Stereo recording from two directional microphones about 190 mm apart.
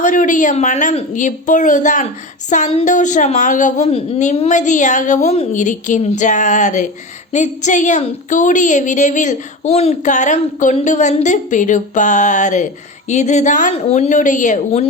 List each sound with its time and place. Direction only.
0.0 s a woman's voice: 40° left (ahead or behind)